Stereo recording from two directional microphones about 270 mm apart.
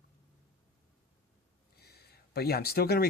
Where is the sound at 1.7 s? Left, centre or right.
Left.